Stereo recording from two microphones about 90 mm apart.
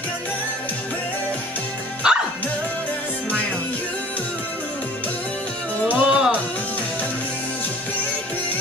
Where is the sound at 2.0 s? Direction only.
10° right (ahead or behind).